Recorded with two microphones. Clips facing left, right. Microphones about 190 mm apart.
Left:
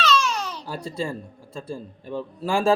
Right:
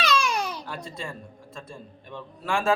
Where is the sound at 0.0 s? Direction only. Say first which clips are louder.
Left 2 dB; 15° right (ahead or behind).